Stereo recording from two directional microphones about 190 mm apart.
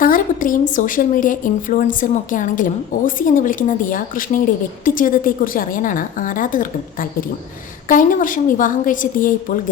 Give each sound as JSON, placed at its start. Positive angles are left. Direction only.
{"t": 0.0, "sound": "a woman's voice", "side_deg": 45}